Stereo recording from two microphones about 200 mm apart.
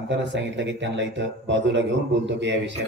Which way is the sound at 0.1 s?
65° right (ahead or behind).